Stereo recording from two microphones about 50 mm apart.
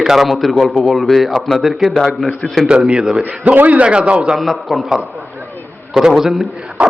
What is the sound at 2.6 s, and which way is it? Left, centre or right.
A man's voice, right.